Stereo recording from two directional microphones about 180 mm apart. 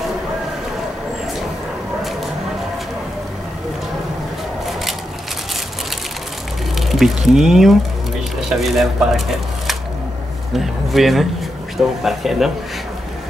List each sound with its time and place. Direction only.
6.9 s speech: centre (ahead or behind)
10.5 s speech: centre (ahead or behind)